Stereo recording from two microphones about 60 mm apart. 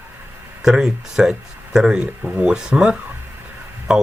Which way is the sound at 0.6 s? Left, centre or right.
Centre.